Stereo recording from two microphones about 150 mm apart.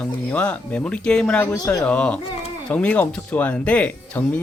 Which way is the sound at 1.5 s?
20° left (ahead or behind).